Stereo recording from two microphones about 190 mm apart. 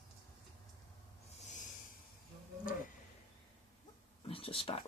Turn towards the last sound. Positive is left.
turn(degrees=30)  # may be behind; listen again after turning